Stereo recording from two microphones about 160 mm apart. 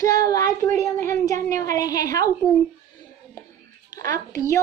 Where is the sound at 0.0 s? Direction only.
20° left (ahead or behind).